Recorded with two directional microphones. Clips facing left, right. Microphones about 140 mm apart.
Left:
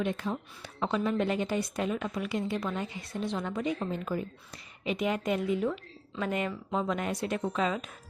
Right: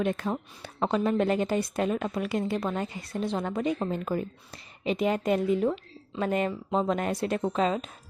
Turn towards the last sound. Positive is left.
turn(degrees=-30)  # may be behind; listen again after turning